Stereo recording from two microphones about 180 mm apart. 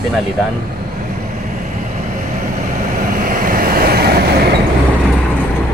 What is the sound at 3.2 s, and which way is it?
Vehicle, 50° right (ahead or behind).